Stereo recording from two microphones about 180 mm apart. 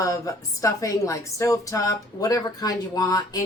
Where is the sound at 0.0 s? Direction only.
20° left (ahead or behind).